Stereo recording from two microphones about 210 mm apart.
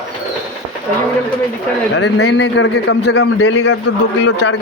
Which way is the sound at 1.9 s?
55° left (ahead or behind).